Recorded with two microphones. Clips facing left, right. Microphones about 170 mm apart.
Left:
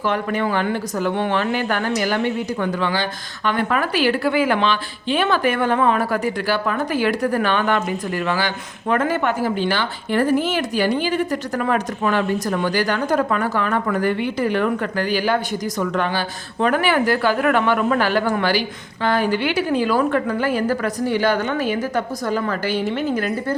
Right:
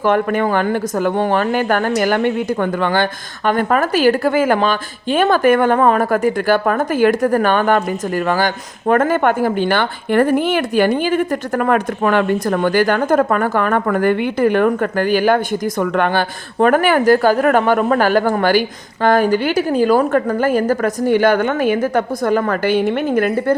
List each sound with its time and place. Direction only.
0.0 s speech: 50° right (ahead or behind)